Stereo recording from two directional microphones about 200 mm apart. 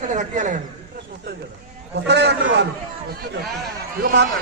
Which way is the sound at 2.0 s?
60° right (ahead or behind).